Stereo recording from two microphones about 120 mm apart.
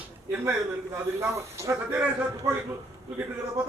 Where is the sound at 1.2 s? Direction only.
20° right (ahead or behind).